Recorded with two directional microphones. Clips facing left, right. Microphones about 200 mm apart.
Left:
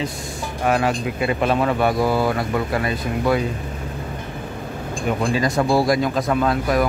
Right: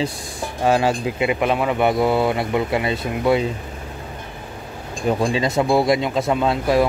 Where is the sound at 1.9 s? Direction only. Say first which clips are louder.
Right 1 dB; 25° right (ahead or behind).